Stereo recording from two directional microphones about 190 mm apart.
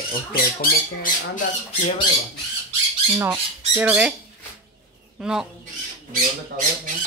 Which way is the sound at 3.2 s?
10° right (ahead or behind).